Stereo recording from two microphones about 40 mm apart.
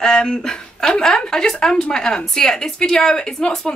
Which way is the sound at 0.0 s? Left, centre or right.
Centre.